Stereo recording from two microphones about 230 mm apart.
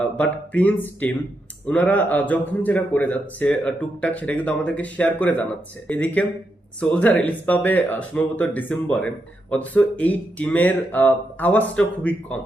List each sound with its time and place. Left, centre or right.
0.0 s speech: centre